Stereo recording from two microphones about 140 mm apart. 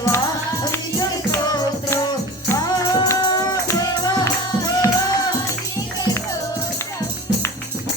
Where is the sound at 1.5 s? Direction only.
30° left (ahead or behind).